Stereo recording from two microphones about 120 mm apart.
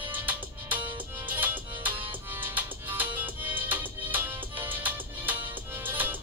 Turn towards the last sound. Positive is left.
turn(degrees=-15)  # may be behind; listen again after turning